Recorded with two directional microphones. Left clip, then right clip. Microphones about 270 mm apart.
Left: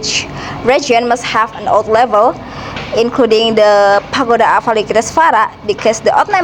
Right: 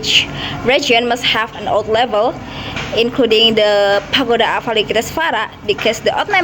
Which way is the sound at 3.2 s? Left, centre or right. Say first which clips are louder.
Right 1 dB; left.